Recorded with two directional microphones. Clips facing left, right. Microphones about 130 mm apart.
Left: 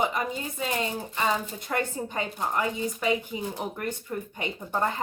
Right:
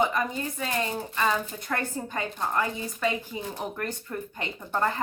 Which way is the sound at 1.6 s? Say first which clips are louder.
Left 1 dB; 20° left (ahead or behind).